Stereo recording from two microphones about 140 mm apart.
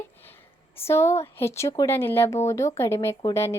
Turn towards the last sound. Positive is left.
turn(degrees=20)  # may be behind; listen again after turning